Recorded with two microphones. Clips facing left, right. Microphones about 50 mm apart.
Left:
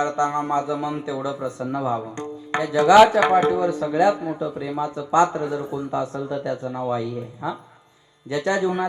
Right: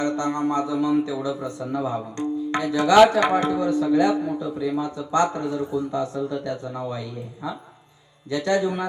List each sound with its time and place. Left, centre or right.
0.0 s speech: left